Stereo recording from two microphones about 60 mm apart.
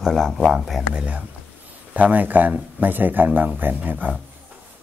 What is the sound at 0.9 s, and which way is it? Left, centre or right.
Speech, right.